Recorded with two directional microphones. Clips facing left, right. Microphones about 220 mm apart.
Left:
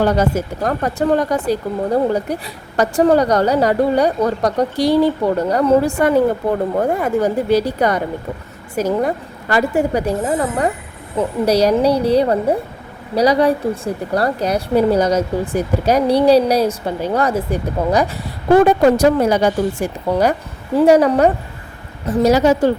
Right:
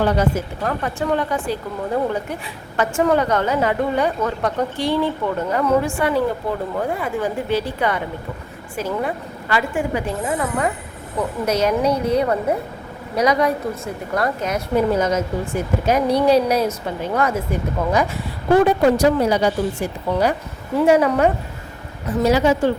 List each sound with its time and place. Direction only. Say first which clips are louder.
0.0 s speech: left 3 dB; 40° left (ahead or behind)
6.0 s speech: left 5 dB; 45° left (ahead or behind)
18.6 s speech: left 2 dB; 45° left (ahead or behind)
20.8 s speech: left 4 dB; 40° left (ahead or behind)